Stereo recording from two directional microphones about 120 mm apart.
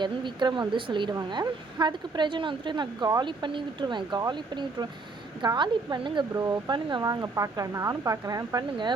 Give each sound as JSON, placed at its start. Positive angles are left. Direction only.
{"t": 0.0, "sound": "a woman's voice", "side_deg": -40}
{"t": 7.0, "sound": "speech", "side_deg": -30}